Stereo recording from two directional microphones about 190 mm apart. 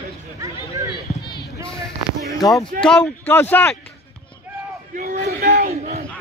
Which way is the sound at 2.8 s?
5° left (ahead or behind).